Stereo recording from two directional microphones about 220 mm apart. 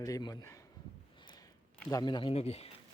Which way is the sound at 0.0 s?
15° left (ahead or behind).